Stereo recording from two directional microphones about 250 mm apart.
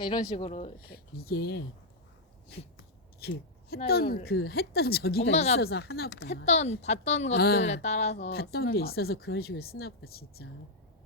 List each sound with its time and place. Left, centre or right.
0.0 s speech: left
0.9 s speech: left
2.7 s scissors: left
3.8 s speech: left
5.3 s speech: left
5.5 s speech: left
6.3 s speech: left
7.3 s speech: left
7.6 s speech: left